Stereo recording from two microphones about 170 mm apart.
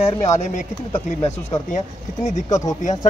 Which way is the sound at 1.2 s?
40° left (ahead or behind).